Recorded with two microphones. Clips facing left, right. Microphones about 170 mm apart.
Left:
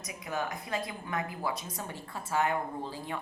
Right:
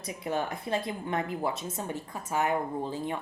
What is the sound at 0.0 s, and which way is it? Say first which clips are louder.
A woman's voice: right 4 dB; 30° right (ahead or behind).